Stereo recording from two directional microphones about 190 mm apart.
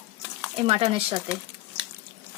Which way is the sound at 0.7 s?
30° right (ahead or behind).